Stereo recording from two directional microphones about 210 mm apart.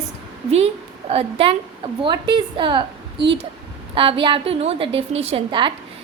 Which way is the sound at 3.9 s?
25° right (ahead or behind).